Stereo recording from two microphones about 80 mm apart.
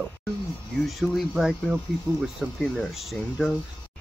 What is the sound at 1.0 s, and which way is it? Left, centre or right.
Speech, centre.